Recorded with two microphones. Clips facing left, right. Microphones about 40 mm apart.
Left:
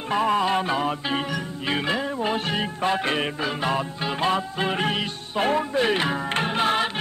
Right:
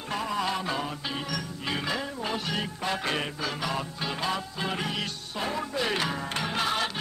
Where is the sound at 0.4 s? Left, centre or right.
Left.